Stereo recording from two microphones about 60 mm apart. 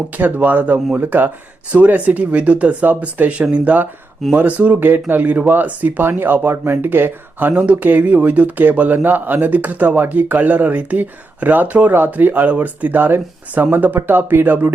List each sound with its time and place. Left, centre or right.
0.2 s speech: right
7.6 s speech: right